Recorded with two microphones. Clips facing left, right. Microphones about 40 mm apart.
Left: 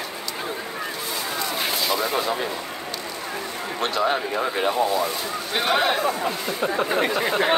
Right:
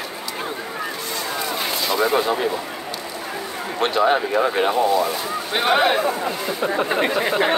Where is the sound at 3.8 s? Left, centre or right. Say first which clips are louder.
Right 5 dB; right.